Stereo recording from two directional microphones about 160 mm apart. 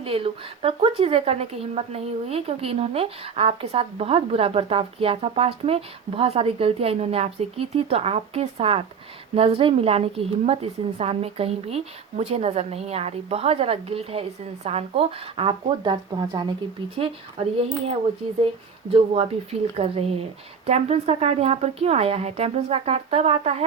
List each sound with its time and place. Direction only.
0.0 s a woman's voice: 35° right (ahead or behind)
18.9 s a woman's voice: 35° right (ahead or behind)